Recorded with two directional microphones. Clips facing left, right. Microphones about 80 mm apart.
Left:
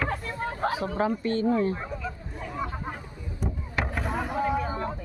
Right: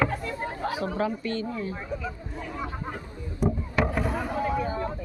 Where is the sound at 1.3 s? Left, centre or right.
Left.